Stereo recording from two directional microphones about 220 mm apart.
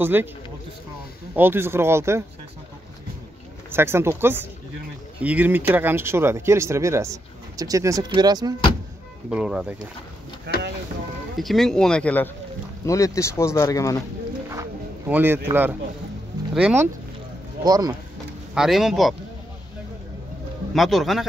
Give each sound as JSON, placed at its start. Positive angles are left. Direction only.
{"t": 0.0, "sound": "speech", "side_deg": -10}
{"t": 1.3, "sound": "speech", "side_deg": -10}
{"t": 3.7, "sound": "speech", "side_deg": -10}
{"t": 9.3, "sound": "speech", "side_deg": -5}
{"t": 10.5, "sound": "boat", "side_deg": -50}
{"t": 11.3, "sound": "speech", "side_deg": 0}
{"t": 14.5, "sound": "music", "side_deg": -10}
{"t": 16.5, "sound": "speech", "side_deg": -5}
{"t": 18.5, "sound": "speech", "side_deg": 0}
{"t": 20.7, "sound": "speech", "side_deg": 0}